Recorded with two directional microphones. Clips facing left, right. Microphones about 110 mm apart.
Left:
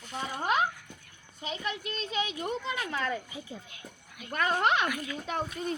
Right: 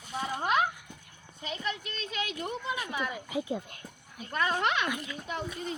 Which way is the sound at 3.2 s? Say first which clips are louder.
Right 10 dB; 70° right (ahead or behind).